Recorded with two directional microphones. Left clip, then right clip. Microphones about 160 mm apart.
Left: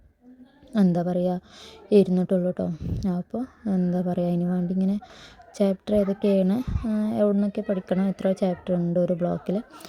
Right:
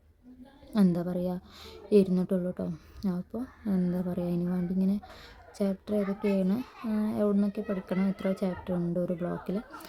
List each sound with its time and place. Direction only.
0.7 s a woman's voice: 25° left (ahead or behind)